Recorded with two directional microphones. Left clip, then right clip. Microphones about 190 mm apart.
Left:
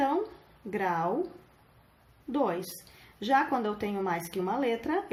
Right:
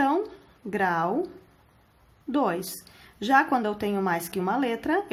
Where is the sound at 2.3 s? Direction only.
45° right (ahead or behind).